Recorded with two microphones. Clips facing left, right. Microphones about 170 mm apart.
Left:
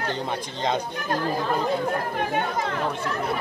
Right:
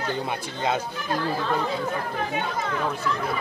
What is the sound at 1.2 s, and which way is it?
Speech, 15° left (ahead or behind).